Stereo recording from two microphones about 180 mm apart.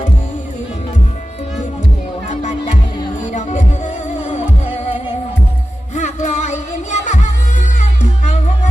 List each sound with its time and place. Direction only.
2.3 s music: 40° left (ahead or behind)
5.9 s music: 40° left (ahead or behind)